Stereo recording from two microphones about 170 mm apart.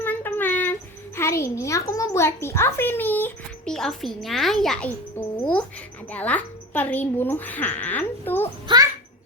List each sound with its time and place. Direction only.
0.0 s a child's voice: 10° left (ahead or behind)
6.1 s speech: 10° left (ahead or behind)
8.6 s babbling: 20° right (ahead or behind)